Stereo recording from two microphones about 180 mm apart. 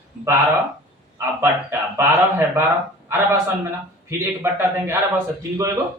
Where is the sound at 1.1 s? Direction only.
15° right (ahead or behind).